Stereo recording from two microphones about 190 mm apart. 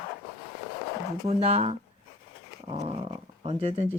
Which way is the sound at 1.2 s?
35° right (ahead or behind).